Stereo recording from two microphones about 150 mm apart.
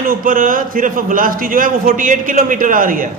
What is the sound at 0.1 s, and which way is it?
A man's voice, 65° right (ahead or behind).